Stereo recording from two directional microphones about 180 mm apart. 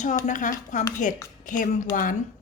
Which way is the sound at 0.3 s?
45° left (ahead or behind).